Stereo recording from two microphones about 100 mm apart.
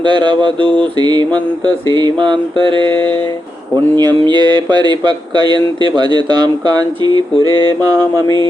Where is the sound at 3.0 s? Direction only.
20° left (ahead or behind).